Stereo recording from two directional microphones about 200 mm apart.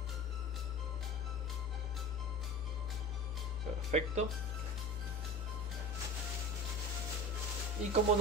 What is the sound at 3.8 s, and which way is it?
Speech, 35° right (ahead or behind).